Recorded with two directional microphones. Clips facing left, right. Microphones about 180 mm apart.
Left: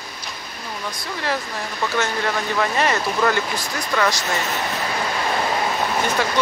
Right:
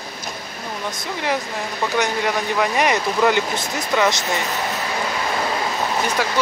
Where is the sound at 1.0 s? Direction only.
15° right (ahead or behind).